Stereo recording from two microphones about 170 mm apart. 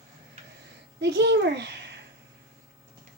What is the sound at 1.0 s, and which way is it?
Speech, 85° right.